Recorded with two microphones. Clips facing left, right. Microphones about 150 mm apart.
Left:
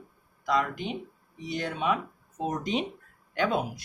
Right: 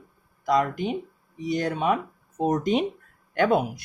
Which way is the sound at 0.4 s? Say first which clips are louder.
Right 5 dB; 45° right (ahead or behind).